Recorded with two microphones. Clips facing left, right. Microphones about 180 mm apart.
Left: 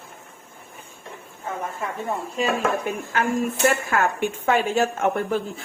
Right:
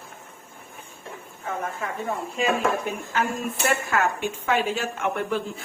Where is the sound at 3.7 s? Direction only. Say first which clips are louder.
Left 1 dB; 50° left (ahead or behind).